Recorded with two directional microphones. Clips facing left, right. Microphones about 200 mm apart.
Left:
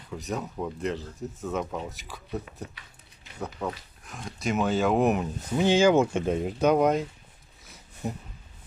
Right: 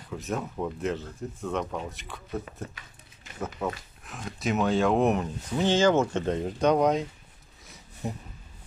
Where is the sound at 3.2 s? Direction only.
45° right (ahead or behind).